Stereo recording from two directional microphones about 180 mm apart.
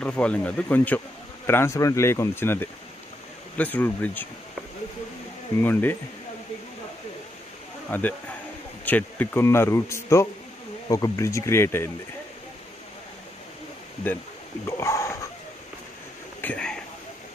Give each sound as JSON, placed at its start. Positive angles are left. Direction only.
{"t": 0.0, "sound": "speech", "side_deg": 5}
{"t": 5.6, "sound": "speech", "side_deg": 10}
{"t": 7.9, "sound": "speech", "side_deg": 10}
{"t": 14.7, "sound": "speech", "side_deg": 15}
{"t": 16.3, "sound": "a sound", "side_deg": 5}